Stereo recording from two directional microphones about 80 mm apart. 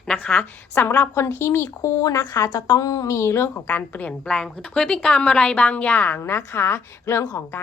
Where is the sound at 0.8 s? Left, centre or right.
Left.